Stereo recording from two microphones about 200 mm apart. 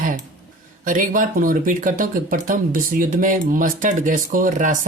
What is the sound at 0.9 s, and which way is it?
Speech, 40° right (ahead or behind).